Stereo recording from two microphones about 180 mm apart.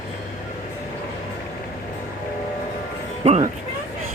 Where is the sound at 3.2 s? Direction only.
35° right (ahead or behind).